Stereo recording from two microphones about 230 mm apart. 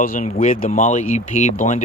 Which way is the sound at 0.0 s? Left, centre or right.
Left.